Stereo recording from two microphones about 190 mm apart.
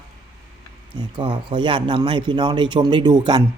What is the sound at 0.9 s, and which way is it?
Speech, 25° right (ahead or behind).